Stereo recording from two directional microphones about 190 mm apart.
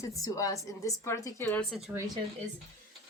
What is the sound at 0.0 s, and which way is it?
A woman's voice, 15° left (ahead or behind).